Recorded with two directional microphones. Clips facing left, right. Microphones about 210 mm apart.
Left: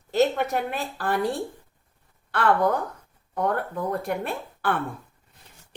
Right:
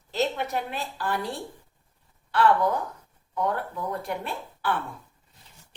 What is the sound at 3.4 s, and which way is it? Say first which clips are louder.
A woman's voice: left 2 dB; 55° left (ahead or behind).